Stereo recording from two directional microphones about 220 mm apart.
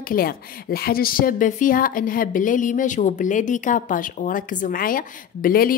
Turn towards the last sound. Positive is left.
turn(degrees=40)  # may be behind; listen again after turning